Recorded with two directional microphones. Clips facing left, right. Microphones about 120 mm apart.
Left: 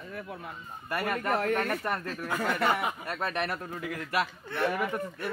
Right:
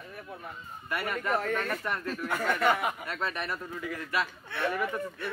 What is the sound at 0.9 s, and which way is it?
Speech, 45° left (ahead or behind).